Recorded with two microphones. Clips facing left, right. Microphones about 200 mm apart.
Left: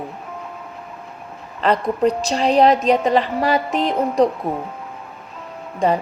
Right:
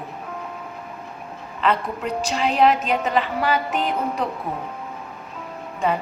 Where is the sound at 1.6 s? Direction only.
40° left (ahead or behind).